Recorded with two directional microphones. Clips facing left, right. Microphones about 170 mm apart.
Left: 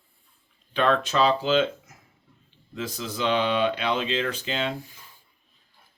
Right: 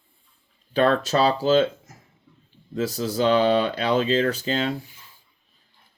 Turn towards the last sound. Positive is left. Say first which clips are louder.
# right 5 dB
turn(degrees=-40)  # may be behind; listen again after turning